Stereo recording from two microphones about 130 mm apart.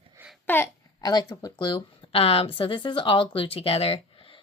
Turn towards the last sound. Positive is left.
turn(degrees=45)  # may be behind; listen again after turning